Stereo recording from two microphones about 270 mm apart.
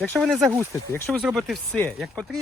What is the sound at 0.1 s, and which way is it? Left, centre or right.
Speech, centre.